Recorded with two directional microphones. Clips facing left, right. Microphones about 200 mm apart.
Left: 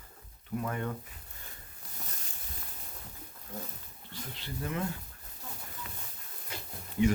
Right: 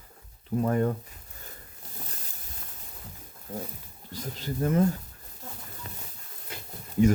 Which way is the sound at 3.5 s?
35° right (ahead or behind).